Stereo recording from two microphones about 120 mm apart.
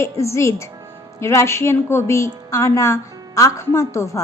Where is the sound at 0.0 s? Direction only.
25° left (ahead or behind).